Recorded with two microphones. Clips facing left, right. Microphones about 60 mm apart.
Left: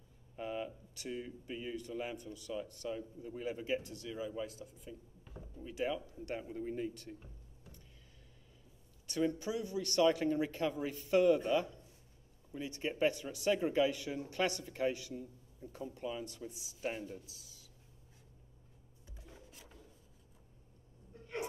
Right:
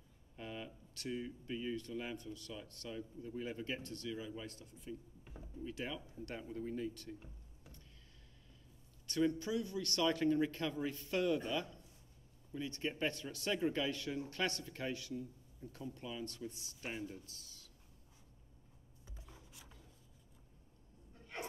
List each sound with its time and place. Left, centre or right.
0.4 s speech: centre
9.0 s a sound: centre
9.3 s speech: left